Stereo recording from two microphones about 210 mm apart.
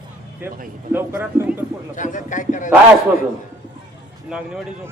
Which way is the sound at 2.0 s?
35° left (ahead or behind).